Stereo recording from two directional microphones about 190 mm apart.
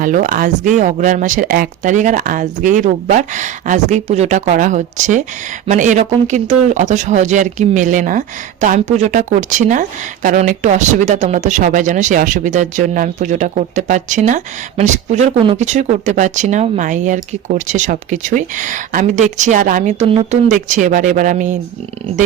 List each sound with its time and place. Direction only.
0.0 s speech: 45° right (ahead or behind)